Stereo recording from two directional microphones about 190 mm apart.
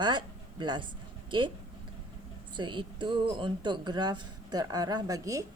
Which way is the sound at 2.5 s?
25° right (ahead or behind).